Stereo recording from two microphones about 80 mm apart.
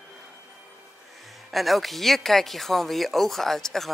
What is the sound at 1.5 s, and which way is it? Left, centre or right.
Speech, centre.